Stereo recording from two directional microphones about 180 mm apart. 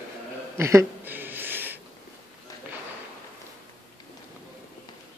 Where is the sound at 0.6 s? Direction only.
15° right (ahead or behind).